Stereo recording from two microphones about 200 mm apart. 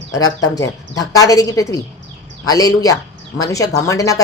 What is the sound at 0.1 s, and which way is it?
A woman's voice, 15° left (ahead or behind).